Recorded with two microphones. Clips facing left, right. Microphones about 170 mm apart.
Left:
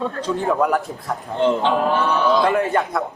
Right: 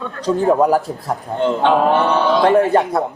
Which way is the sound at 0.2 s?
35° right (ahead or behind).